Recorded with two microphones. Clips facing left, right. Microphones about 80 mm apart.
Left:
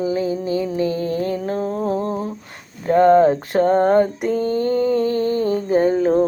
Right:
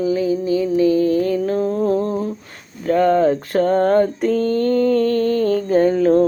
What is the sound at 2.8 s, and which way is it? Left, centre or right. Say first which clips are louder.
Speech: left 2 dB; left.